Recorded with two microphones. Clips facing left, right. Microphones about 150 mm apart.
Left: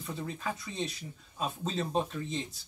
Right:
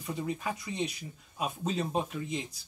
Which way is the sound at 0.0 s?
10° right (ahead or behind).